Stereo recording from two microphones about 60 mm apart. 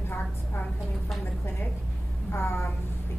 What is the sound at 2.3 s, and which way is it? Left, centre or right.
Speech, left.